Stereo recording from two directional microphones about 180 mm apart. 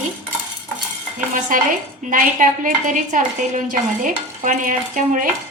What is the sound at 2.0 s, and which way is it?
Speech, 45° right (ahead or behind).